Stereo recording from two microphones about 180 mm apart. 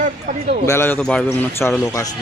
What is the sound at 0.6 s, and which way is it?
Speech, 15° left (ahead or behind).